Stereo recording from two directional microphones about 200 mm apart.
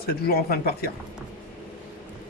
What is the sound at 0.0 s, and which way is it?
Speech, 50° left (ahead or behind).